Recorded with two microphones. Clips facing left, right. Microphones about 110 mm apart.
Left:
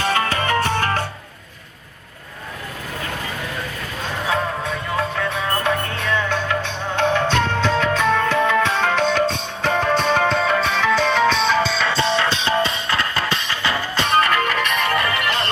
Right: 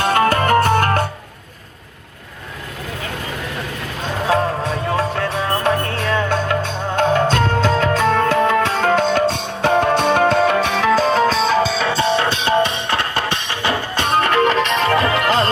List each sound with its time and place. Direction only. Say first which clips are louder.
0.0 s music: right 5 dB; 50° right (ahead or behind)
4.3 s music: right 5 dB; 30° right (ahead or behind); by 10.8 s 60° right (ahead or behind)
10.8 s music: right 3 dB; 40° right (ahead or behind); by 14.3 s 55° right (ahead or behind)
14.3 s music: right 5 dB; 30° right (ahead or behind)
14.8 s music: right 4 dB; 90° right